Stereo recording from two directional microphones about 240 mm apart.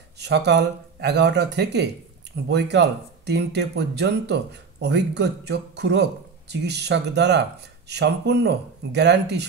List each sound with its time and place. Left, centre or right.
0.2 s speech: right